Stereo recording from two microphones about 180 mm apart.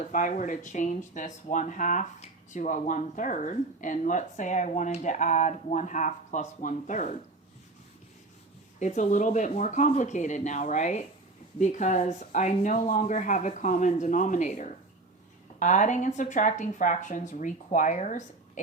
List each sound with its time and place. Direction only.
0.1 s speech: 45° left (ahead or behind)
8.8 s speech: 45° left (ahead or behind)